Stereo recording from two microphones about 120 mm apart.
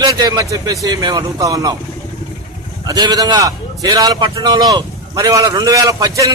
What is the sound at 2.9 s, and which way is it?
A man's voice, 35° right (ahead or behind).